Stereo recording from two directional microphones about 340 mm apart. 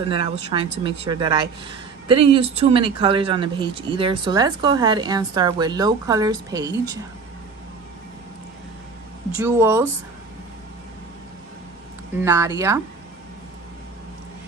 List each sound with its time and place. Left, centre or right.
0.1 s speech: centre
9.4 s speech: centre
12.2 s speech: centre